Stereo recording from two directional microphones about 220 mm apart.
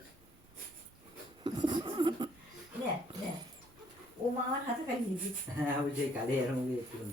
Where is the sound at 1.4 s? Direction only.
20° right (ahead or behind).